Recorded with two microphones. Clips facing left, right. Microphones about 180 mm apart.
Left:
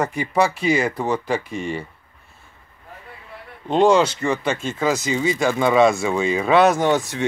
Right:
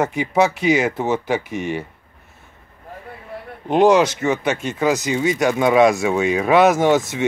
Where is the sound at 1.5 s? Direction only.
75° right (ahead or behind).